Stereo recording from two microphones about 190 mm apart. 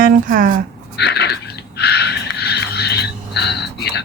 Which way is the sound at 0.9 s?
60° left (ahead or behind).